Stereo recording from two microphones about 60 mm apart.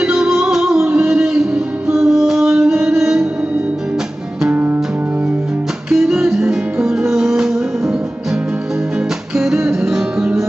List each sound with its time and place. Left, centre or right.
0.4 s music: centre
4.5 s music: right
5.9 s music: centre